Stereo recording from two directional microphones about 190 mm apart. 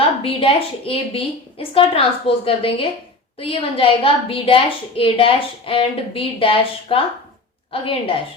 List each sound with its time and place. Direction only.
0.2 s a woman's voice: 30° left (ahead or behind)